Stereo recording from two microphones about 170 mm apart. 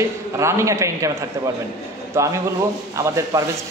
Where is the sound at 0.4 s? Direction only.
15° right (ahead or behind).